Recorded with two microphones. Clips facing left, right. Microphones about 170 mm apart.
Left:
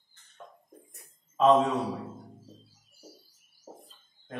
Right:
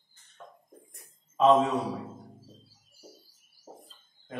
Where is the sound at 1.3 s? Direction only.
10° right (ahead or behind).